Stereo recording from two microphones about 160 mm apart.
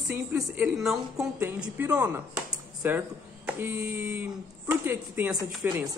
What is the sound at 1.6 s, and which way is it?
Speech, 10° right (ahead or behind).